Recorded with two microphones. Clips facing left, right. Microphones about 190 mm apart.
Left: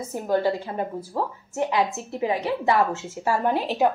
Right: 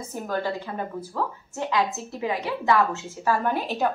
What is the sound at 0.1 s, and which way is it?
A woman's voice, 25° left (ahead or behind).